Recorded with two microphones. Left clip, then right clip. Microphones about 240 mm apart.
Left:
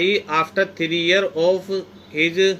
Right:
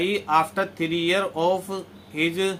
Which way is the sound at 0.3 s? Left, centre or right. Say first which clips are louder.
Left 2 dB; right.